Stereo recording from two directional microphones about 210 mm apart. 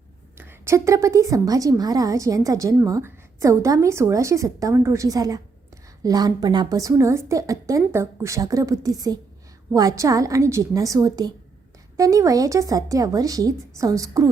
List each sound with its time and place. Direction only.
0.3 s a woman's voice: 10° right (ahead or behind)